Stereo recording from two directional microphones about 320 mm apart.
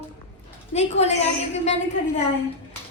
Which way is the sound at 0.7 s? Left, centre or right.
Centre.